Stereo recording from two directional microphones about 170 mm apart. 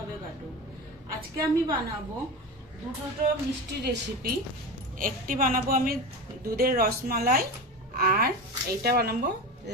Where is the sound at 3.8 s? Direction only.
75° right (ahead or behind).